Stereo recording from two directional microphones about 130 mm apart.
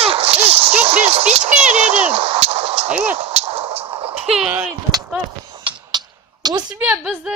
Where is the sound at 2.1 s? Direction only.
50° right (ahead or behind).